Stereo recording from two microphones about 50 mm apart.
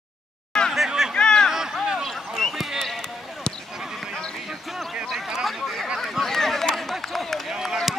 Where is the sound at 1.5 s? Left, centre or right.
Centre.